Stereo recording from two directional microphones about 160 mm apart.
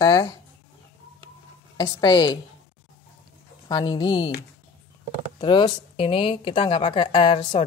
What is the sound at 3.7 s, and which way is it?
Speech, 30° left (ahead or behind).